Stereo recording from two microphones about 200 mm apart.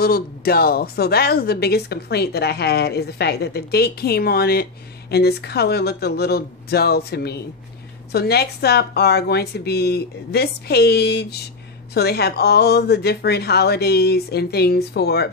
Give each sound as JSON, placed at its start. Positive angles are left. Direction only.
{"t": 0.0, "sound": "a woman's voice", "side_deg": 50}